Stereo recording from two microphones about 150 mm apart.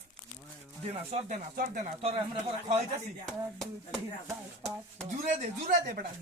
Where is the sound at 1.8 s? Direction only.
40° right (ahead or behind).